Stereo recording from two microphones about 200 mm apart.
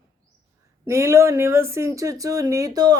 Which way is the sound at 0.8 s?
15° right (ahead or behind).